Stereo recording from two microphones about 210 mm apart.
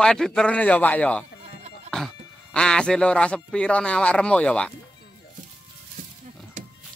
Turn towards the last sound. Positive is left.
turn(degrees=-35)  # may be behind; listen again after turning